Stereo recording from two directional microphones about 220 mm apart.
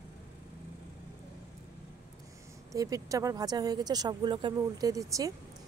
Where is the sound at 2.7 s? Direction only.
15° right (ahead or behind).